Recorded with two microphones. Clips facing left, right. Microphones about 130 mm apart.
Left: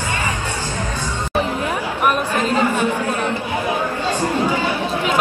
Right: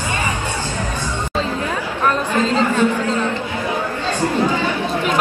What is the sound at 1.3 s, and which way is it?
Chatter, 15° left (ahead or behind).